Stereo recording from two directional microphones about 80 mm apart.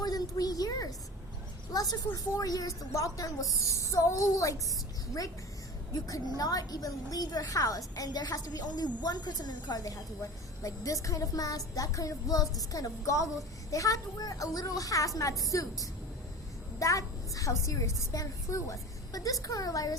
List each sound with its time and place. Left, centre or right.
0.0 s a woman's voice: left
5.9 s a woman's voice: left